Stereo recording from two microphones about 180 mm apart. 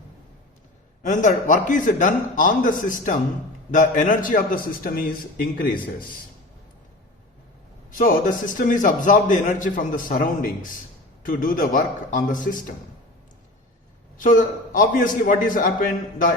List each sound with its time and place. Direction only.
1.0 s a man's voice: 45° left (ahead or behind)
7.9 s a man's voice: 45° left (ahead or behind)
14.2 s a man's voice: 45° left (ahead or behind)